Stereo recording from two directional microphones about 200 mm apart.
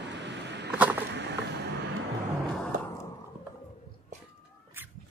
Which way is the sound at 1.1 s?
60° right (ahead or behind).